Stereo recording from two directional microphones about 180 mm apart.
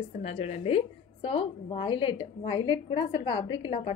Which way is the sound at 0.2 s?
35° left (ahead or behind).